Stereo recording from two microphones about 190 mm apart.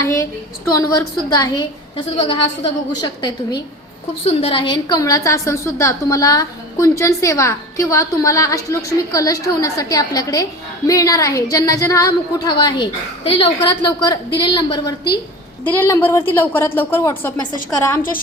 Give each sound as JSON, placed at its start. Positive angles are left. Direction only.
{"t": 0.0, "sound": "a woman's voice", "side_deg": 15}
{"t": 15.6, "sound": "a woman's voice", "side_deg": 10}